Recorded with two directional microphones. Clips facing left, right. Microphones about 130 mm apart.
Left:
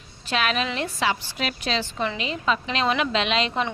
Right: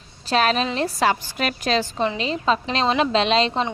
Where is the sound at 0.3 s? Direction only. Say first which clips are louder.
Right 5 dB; 35° right (ahead or behind).